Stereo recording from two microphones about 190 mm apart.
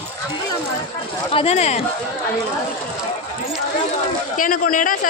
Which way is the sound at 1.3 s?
30° left (ahead or behind).